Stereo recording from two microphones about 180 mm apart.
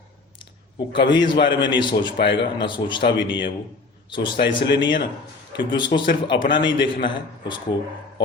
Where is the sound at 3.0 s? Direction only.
80° left.